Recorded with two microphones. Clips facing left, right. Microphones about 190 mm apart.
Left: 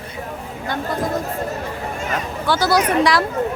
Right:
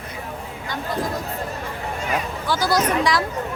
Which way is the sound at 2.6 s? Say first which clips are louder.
Left 3 dB; 70° left (ahead or behind).